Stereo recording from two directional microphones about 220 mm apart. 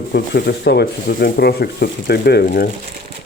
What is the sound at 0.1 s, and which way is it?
Speech, 50° left (ahead or behind).